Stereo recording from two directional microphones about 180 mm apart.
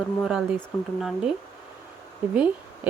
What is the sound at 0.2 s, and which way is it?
Speech, centre (ahead or behind).